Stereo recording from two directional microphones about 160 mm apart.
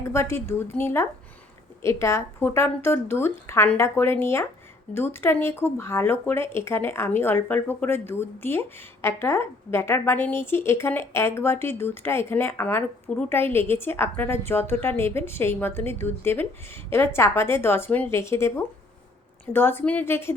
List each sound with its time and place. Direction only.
0.0 s speech: 15° left (ahead or behind)